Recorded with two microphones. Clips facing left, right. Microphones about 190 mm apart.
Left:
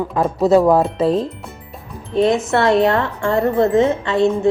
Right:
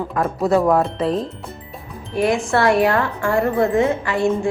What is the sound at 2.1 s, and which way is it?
Speech, 20° left (ahead or behind).